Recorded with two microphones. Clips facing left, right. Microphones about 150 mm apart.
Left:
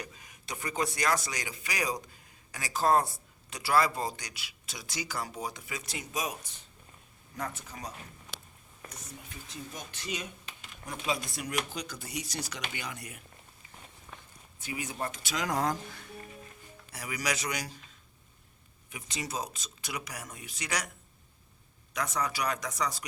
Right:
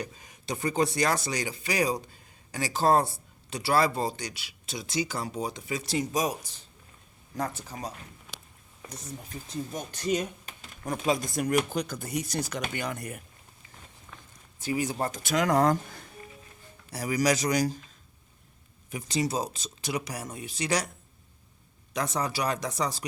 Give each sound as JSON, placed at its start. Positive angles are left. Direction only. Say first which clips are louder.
{"t": 0.0, "sound": "speech", "louder": "right 7 dB", "side_deg": -30}
{"t": 7.3, "sound": "speech", "louder": "right 5 dB", "side_deg": -35}
{"t": 8.9, "sound": "speech", "louder": "right 8 dB", "side_deg": -40}
{"t": 14.6, "sound": "speech", "louder": "right 7 dB", "side_deg": -35}
{"t": 16.9, "sound": "speech", "louder": "right 9 dB", "side_deg": -35}
{"t": 18.9, "sound": "speech", "louder": "right 10 dB", "side_deg": -35}
{"t": 21.9, "sound": "speech", "louder": "right 3 dB", "side_deg": -30}